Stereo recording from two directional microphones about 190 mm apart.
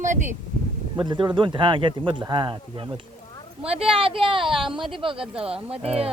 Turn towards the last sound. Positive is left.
turn(degrees=-30)  # may be behind; listen again after turning